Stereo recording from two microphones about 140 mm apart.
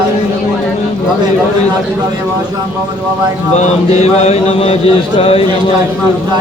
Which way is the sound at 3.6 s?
50° left (ahead or behind).